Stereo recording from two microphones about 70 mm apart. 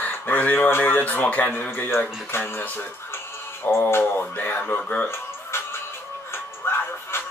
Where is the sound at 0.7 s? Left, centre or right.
Left.